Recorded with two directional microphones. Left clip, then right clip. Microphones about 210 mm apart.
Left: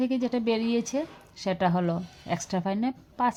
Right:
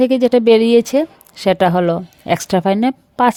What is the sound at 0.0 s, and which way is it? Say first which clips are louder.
A woman's voice: right 16 dB; 55° right (ahead or behind).